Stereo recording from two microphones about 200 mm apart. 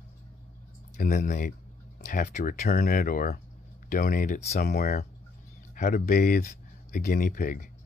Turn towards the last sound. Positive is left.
turn(degrees=40)  # may be behind; listen again after turning